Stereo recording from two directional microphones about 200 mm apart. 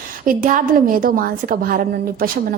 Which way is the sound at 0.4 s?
45° right (ahead or behind).